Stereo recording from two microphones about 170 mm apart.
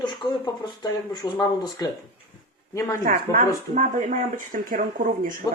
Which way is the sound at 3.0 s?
50° right (ahead or behind).